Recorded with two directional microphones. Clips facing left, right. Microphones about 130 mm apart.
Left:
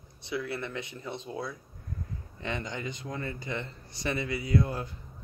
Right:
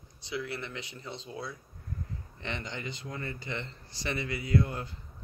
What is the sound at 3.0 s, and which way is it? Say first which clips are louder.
Speech: left 3 dB; 20° left (ahead or behind).